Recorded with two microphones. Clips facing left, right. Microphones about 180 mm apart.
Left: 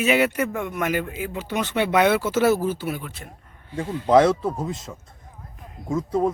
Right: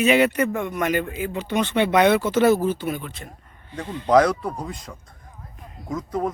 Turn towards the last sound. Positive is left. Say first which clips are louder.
# left 4 dB
turn(degrees=25)  # may be behind; listen again after turning